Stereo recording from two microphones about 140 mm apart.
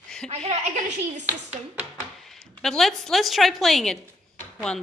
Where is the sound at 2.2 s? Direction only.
5° left (ahead or behind).